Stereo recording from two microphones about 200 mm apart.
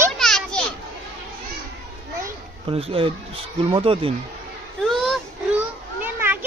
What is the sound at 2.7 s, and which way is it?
Speech, 30° right (ahead or behind).